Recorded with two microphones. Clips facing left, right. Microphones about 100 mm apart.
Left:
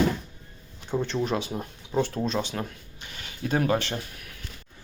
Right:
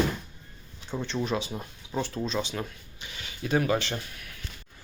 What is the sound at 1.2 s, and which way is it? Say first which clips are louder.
Speech: left 2 dB; 50° left (ahead or behind).